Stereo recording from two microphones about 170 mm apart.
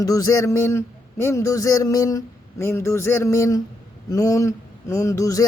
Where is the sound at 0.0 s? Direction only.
20° left (ahead or behind).